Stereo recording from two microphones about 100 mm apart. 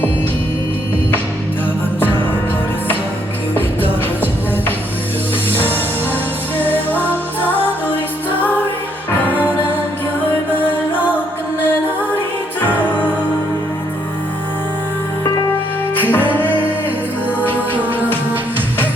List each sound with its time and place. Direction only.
3.5 s music: 20° left (ahead or behind)
6.6 s music: 20° left (ahead or behind)
12.6 s music: 15° left (ahead or behind)
16.0 s music: 20° left (ahead or behind)